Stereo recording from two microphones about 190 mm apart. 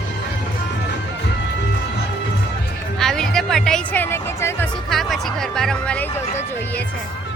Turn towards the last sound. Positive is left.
turn(degrees=35)  # may be behind; listen again after turning